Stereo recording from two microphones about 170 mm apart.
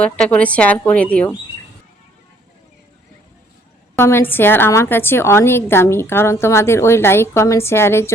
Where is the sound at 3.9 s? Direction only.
15° left (ahead or behind).